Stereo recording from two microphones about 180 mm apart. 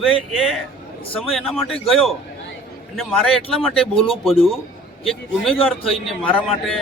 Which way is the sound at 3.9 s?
30° left (ahead or behind).